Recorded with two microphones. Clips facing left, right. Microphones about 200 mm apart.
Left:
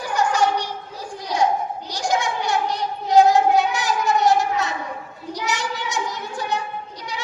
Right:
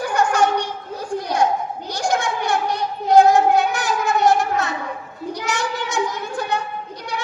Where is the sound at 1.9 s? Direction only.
50° right (ahead or behind).